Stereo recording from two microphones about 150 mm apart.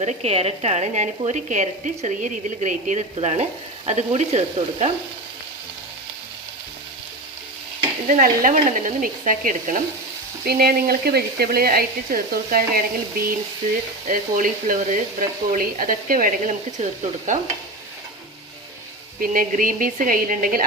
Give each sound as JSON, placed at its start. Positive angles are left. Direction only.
{"t": 0.0, "sound": "speech", "side_deg": -45}
{"t": 8.0, "sound": "speech", "side_deg": -65}
{"t": 10.4, "sound": "speech", "side_deg": -90}
{"t": 14.1, "sound": "speech", "side_deg": -65}
{"t": 19.2, "sound": "speech", "side_deg": -70}